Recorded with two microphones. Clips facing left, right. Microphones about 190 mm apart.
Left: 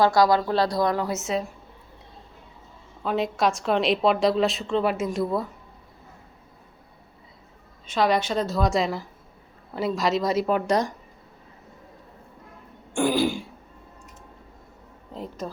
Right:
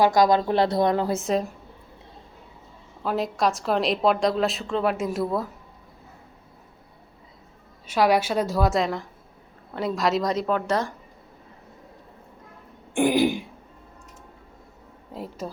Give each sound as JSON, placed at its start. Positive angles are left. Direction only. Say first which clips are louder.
{"t": 0.0, "sound": "a woman's voice", "louder": "right 1 dB", "side_deg": -15}
{"t": 3.0, "sound": "a woman's voice", "louder": "even", "side_deg": 0}
{"t": 7.9, "sound": "a woman's voice", "louder": "right 2 dB", "side_deg": -10}
{"t": 12.9, "sound": "throat clearing", "louder": "right 2 dB", "side_deg": -20}
{"t": 15.1, "sound": "a sound", "louder": "even", "side_deg": -10}